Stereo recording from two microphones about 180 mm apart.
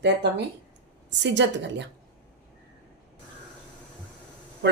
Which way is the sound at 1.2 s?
80° right.